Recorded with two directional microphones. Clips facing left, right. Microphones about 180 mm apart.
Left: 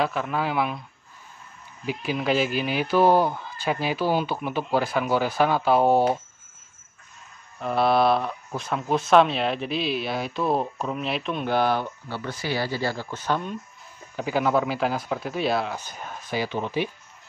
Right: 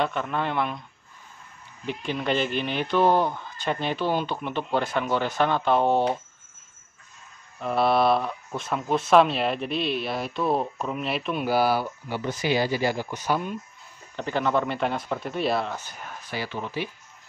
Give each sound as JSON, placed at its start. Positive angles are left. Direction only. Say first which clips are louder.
{"t": 0.0, "sound": "speech", "louder": "left 1 dB", "side_deg": 5}
{"t": 1.9, "sound": "speech", "louder": "left 2 dB", "side_deg": 5}
{"t": 7.5, "sound": "speech", "louder": "left 1 dB", "side_deg": 0}
{"t": 12.2, "sound": "speech", "louder": "right 4 dB", "side_deg": -20}
{"t": 14.1, "sound": "speech", "louder": "left 2 dB", "side_deg": 5}
{"t": 16.3, "sound": "speech", "louder": "left 5 dB", "side_deg": 20}